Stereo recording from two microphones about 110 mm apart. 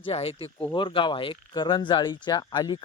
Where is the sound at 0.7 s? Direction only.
50° left (ahead or behind).